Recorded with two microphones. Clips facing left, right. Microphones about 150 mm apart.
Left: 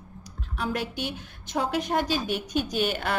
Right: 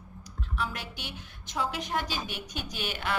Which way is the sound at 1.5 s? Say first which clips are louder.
Left 6 dB; 45° left (ahead or behind).